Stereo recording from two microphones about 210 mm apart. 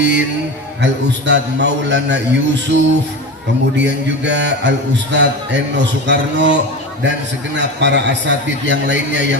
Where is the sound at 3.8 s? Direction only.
55° right (ahead or behind).